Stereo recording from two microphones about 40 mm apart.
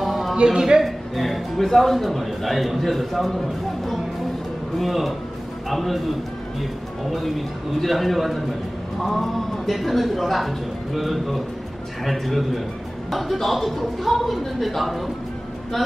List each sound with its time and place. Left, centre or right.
0.0 s a sound: centre
0.4 s speech: centre
0.7 s speech: centre